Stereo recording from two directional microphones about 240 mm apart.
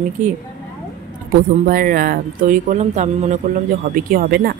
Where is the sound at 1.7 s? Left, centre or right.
Right.